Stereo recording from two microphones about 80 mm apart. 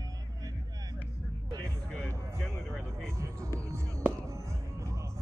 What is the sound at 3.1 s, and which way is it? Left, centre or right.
Music, right.